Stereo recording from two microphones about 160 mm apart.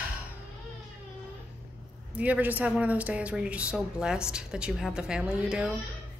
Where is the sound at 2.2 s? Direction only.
10° right (ahead or behind).